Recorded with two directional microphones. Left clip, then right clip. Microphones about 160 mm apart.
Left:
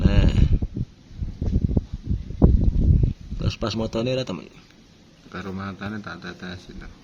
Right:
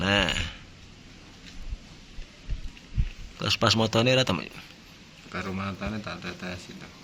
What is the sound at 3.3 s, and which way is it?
Speech, 5° left (ahead or behind).